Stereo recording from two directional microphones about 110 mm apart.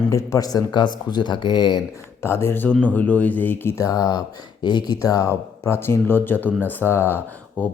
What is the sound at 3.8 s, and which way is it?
A man's voice, 35° left (ahead or behind).